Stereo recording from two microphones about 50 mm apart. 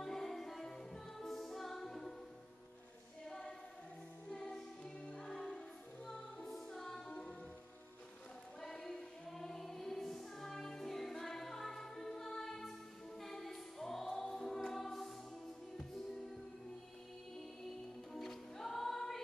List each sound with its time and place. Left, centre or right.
0.0 s music: centre
3.3 s choir: centre
4.3 s music: centre
7.1 s music: left
8.5 s music: centre
13.2 s choir: centre
18.1 s music: centre